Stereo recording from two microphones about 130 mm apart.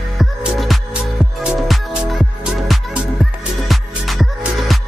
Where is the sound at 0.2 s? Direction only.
Centre (ahead or behind).